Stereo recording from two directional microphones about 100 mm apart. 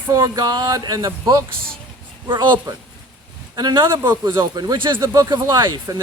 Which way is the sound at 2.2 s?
50° right (ahead or behind).